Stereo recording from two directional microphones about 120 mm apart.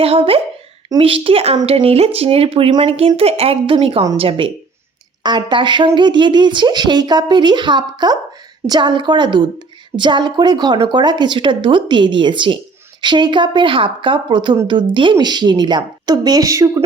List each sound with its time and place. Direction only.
0.0 s speech: 50° right (ahead or behind)
3.2 s a woman's voice: 55° right (ahead or behind); by 16.8 s 30° right (ahead or behind)